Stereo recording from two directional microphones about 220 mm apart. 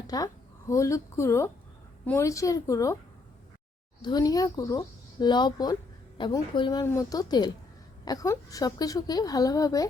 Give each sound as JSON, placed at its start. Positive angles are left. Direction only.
{"t": 0.1, "sound": "a woman's voice", "side_deg": 15}
{"t": 4.0, "sound": "a woman's voice", "side_deg": 15}